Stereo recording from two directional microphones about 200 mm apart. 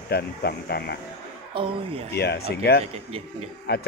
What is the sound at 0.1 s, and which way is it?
Speech, 50° left (ahead or behind).